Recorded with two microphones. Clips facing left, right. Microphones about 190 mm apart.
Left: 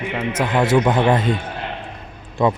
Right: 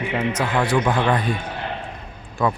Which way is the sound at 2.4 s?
20° left (ahead or behind).